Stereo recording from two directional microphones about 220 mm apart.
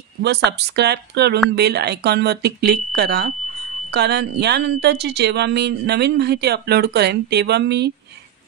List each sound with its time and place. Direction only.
0.2 s speech: 50° right (ahead or behind)